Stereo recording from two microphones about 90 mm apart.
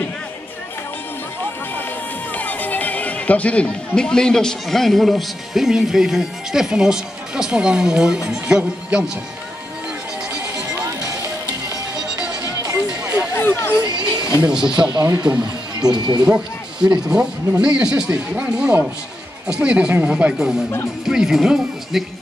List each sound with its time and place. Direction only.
2.3 s speech: 20° left (ahead or behind); by 9.0 s 10° right (ahead or behind)
13.0 s a sound: 10° right (ahead or behind)
13.3 s chatter: 25° left (ahead or behind)
14.4 s speech: 5° right (ahead or behind)
14.9 s speech: 50° right (ahead or behind)
16.3 s speech: 10° right (ahead or behind)